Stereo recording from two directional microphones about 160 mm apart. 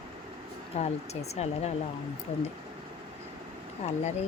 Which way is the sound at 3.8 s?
45° left (ahead or behind).